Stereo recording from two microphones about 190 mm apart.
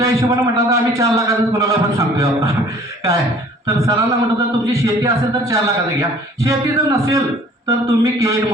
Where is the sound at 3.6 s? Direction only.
20° right (ahead or behind).